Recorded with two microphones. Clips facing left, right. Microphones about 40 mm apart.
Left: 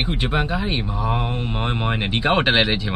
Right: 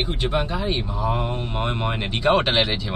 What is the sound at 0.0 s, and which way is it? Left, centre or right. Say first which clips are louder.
Speech: left 1 dB; left.